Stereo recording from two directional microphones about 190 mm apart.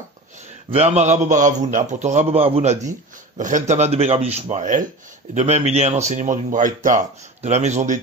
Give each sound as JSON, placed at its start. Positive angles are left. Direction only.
{"t": 0.7, "sound": "a man's voice", "side_deg": -35}